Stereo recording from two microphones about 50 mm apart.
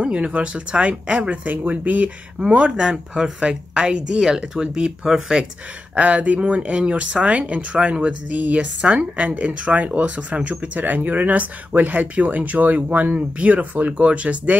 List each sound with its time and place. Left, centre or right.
0.0 s speech: right
2.4 s speech: centre
5.9 s speech: right